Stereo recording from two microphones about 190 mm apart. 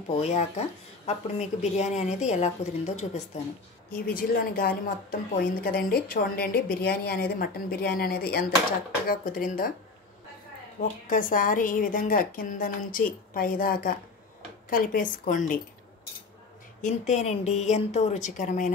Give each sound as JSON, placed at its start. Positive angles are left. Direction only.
{"t": 0.1, "sound": "a woman's voice", "side_deg": 35}
{"t": 3.9, "sound": "a woman's voice", "side_deg": 50}
{"t": 10.8, "sound": "a woman's voice", "side_deg": 45}
{"t": 16.8, "sound": "a woman's voice", "side_deg": 40}